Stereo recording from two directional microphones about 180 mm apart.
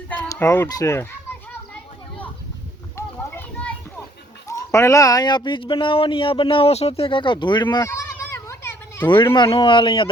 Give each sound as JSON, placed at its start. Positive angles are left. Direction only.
{"t": 0.1, "sound": "speech", "side_deg": 15}
{"t": 2.9, "sound": "children playing", "side_deg": 10}
{"t": 4.4, "sound": "speech", "side_deg": 15}
{"t": 7.9, "sound": "children playing", "side_deg": 15}
{"t": 9.3, "sound": "speech", "side_deg": 25}